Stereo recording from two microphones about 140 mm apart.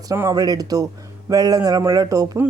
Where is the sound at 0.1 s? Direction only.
25° right (ahead or behind).